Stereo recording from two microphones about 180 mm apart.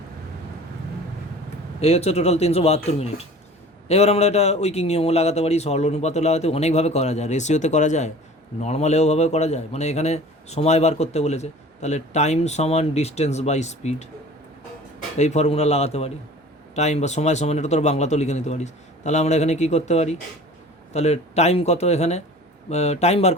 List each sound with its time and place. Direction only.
1.8 s a man's voice: 35° left (ahead or behind)
15.2 s a man's voice: 40° left (ahead or behind)